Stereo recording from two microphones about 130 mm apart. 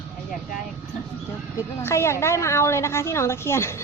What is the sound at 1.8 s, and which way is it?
A woman's voice, 20° left (ahead or behind).